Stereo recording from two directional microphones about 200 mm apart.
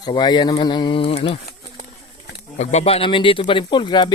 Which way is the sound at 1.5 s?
40° left (ahead or behind).